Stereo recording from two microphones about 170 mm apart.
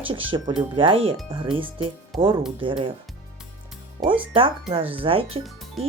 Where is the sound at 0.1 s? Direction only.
30° right (ahead or behind).